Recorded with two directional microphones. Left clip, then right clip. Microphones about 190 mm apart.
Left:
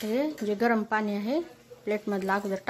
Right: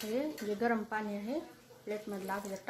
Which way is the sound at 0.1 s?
35° left (ahead or behind).